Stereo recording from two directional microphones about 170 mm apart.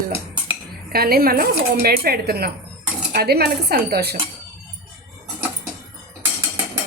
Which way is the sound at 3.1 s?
65° right (ahead or behind).